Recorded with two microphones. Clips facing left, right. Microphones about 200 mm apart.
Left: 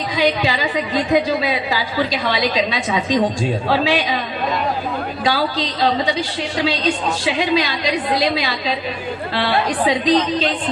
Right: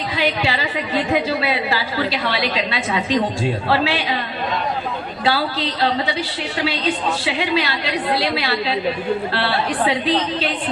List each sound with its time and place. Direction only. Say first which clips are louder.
0.2 s a woman's voice: left 3 dB; 15° left (ahead or behind)
5.2 s a woman's voice: even; 15° left (ahead or behind)